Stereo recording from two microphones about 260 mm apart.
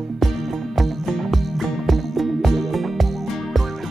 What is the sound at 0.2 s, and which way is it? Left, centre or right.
Music, centre.